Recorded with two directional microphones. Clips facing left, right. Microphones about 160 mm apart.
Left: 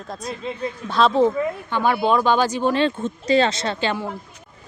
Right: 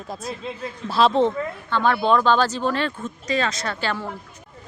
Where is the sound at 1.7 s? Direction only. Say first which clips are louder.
Right 1 dB; 10° left (ahead or behind).